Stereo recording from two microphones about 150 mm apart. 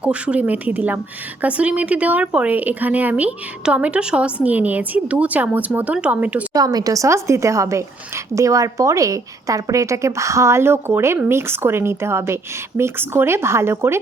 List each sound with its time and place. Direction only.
0.0 s speech: 10° right (ahead or behind)
6.5 s speech: 25° right (ahead or behind)